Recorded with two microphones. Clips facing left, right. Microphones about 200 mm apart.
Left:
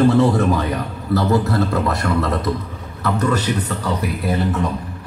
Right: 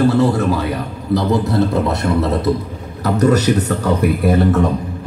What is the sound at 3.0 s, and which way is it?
A man's voice, 40° right (ahead or behind).